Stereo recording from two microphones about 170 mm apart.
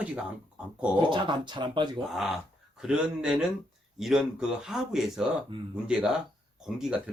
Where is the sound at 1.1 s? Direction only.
30° right (ahead or behind).